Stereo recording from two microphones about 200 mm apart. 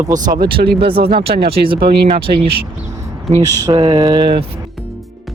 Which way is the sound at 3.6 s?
20° right (ahead or behind).